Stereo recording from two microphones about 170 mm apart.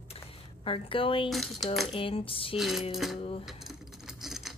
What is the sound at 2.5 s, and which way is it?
Speech, centre (ahead or behind).